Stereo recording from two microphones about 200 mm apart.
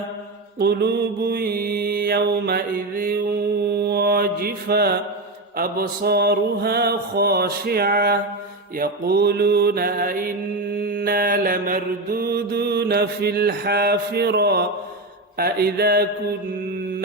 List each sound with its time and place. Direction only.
0.6 s mantra: 55° right (ahead or behind)